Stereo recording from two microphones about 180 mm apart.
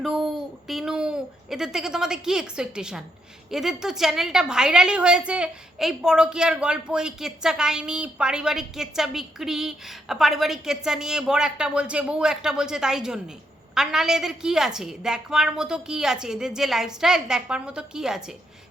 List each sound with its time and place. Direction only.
0.7 s a woman's voice: centre (ahead or behind)